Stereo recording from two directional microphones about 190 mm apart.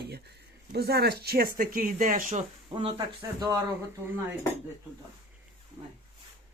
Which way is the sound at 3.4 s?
20° right (ahead or behind).